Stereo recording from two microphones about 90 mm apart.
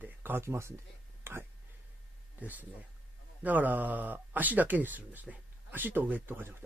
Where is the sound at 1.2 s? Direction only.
30° right (ahead or behind).